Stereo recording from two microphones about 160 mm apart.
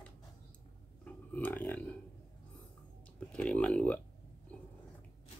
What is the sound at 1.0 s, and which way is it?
Speech, 10° left (ahead or behind).